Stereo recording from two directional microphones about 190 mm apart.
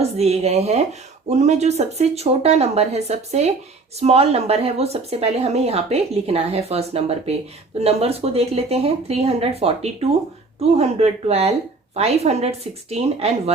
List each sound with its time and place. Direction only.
0.2 s speech: 35° right (ahead or behind)